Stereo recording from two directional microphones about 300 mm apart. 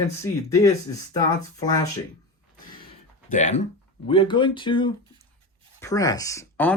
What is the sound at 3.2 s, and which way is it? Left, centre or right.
Speech, left.